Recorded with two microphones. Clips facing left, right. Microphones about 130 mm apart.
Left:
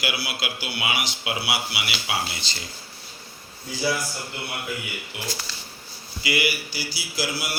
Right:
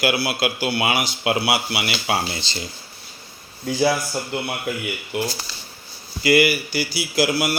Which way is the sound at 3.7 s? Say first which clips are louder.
Right 10 dB; 65° right (ahead or behind).